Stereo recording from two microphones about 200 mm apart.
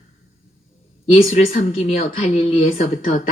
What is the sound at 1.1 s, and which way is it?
Speech, 35° left (ahead or behind).